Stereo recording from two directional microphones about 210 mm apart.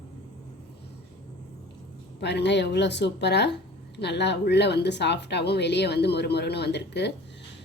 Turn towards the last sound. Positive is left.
turn(degrees=55)  # may be behind; listen again after turning